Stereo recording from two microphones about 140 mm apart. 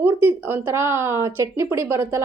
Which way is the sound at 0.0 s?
15° right (ahead or behind).